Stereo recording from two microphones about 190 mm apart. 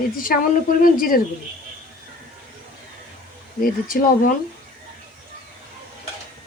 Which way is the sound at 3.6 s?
45° left (ahead or behind).